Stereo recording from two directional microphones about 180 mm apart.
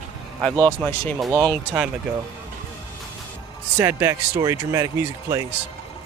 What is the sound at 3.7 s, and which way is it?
Speech, 15° right (ahead or behind).